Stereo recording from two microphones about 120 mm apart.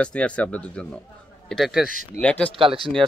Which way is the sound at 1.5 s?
Centre (ahead or behind).